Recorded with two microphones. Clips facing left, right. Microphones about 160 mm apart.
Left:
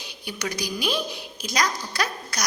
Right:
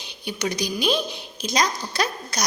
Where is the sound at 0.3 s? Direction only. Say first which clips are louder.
Right 4 dB; 20° right (ahead or behind).